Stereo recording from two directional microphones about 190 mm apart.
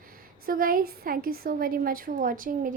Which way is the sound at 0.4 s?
50° right (ahead or behind).